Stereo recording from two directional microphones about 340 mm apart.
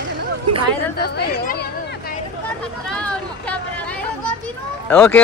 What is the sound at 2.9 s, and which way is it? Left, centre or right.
Speech, centre.